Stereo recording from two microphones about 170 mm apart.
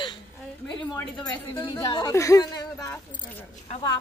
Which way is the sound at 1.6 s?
25° left (ahead or behind).